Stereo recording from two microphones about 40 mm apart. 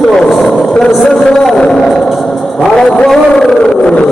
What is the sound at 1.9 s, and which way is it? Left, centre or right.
Music, centre.